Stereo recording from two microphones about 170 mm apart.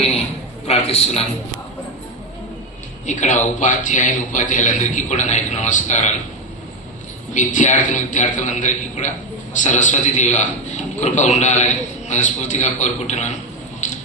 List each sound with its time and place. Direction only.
0.7 s a man's voice: 35° left (ahead or behind)
3.1 s a man's voice: 45° left (ahead or behind)
7.3 s a man's voice: 45° left (ahead or behind)
13.8 s a sound: 40° left (ahead or behind)